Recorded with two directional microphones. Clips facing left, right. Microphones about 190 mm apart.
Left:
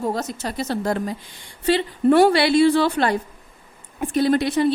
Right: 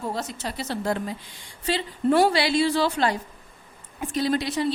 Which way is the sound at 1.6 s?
60° left (ahead or behind).